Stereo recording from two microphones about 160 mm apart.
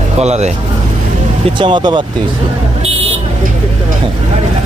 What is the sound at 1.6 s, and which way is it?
Speech, 30° right (ahead or behind).